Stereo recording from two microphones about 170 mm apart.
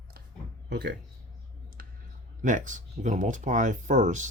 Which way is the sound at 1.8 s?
60° right (ahead or behind).